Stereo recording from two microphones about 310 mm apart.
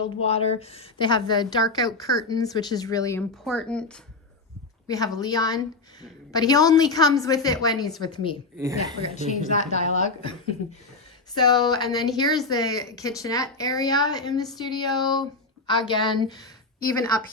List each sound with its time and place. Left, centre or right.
0.0 s a woman's voice: centre
11.3 s speech: centre